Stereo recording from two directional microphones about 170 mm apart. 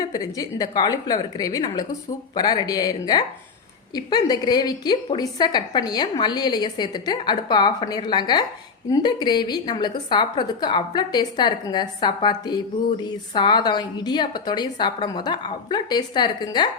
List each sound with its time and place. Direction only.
0.0 s a woman's voice: 20° left (ahead or behind)